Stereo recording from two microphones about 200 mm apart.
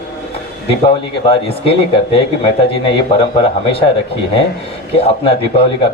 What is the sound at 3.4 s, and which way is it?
Speech, 30° left (ahead or behind).